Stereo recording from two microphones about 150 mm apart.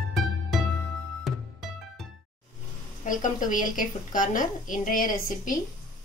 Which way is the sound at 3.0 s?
60° left (ahead or behind).